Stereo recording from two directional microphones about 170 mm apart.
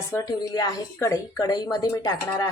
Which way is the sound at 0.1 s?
20° left (ahead or behind).